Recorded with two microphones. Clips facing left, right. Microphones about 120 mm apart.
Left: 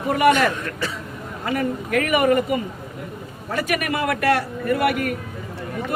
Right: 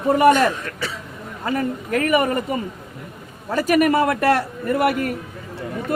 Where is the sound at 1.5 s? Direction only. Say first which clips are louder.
Right 1 dB; 35° right (ahead or behind).